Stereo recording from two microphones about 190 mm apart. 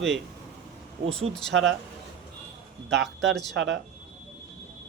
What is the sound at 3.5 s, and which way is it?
Speech, 70° right (ahead or behind).